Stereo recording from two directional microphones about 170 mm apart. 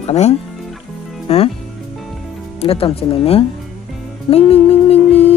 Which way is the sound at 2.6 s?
35° left (ahead or behind).